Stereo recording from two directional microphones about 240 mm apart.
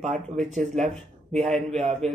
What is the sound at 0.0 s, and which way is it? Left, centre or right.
Speech, right.